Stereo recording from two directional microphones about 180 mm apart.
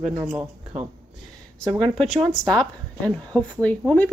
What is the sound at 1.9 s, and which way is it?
Speech, centre (ahead or behind).